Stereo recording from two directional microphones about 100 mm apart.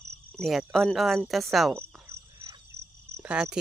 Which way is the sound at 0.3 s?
Centre (ahead or behind).